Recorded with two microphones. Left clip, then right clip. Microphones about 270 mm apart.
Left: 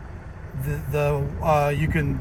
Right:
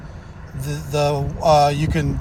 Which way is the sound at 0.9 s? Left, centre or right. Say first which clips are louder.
Right 4 dB; centre.